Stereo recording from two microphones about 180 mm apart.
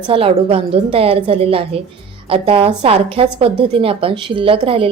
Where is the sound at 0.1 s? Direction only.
30° right (ahead or behind).